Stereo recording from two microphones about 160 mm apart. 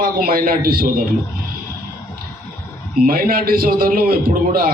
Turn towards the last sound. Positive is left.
turn(degrees=-60)  # may be behind; listen again after turning